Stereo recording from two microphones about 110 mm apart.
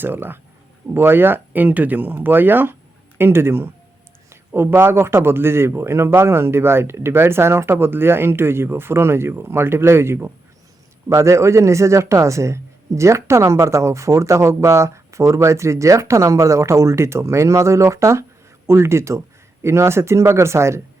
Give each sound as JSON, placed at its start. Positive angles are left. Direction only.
{"t": 0.0, "sound": "a man's voice", "side_deg": -20}